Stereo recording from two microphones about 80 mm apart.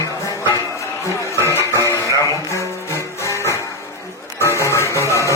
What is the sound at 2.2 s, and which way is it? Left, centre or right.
Music, left.